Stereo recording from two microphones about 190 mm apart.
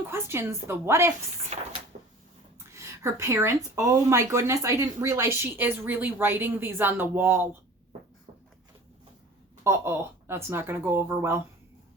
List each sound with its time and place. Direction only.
0.1 s speech: 15° right (ahead or behind)
1.5 s cupboard open or close: 35° right (ahead or behind)
1.9 s a sound: 40° right (ahead or behind)
2.7 s speech: 15° right (ahead or behind)
9.6 s speech: 15° right (ahead or behind)